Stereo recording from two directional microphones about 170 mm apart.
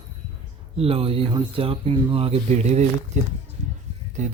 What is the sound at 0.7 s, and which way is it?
A man's voice, 35° right (ahead or behind).